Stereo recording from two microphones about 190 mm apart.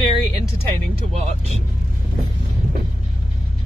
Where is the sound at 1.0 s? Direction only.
35° right (ahead or behind).